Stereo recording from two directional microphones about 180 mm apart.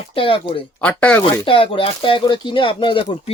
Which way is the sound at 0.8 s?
5° left (ahead or behind).